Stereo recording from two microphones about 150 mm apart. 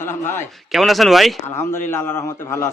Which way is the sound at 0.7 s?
Centre (ahead or behind).